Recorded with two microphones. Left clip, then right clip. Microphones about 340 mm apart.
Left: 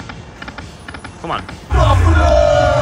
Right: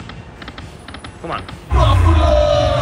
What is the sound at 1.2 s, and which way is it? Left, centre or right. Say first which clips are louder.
Speech: left 3 dB; centre.